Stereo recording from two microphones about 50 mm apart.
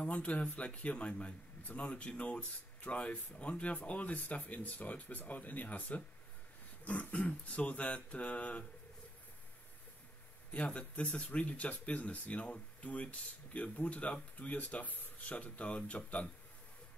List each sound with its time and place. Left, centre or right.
0.0 s speech: left
10.5 s speech: left